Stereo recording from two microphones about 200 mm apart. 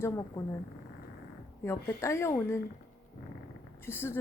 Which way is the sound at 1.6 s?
15° left (ahead or behind).